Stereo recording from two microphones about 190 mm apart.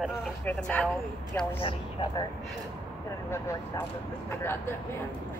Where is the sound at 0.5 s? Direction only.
5° left (ahead or behind).